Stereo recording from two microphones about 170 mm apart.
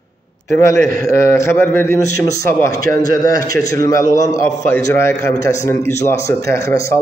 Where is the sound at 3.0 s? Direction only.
20° left (ahead or behind).